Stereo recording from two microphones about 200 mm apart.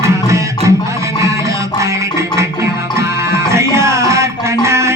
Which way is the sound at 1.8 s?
15° right (ahead or behind).